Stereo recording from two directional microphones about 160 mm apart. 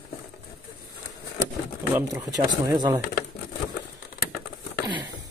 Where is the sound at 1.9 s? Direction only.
20° right (ahead or behind).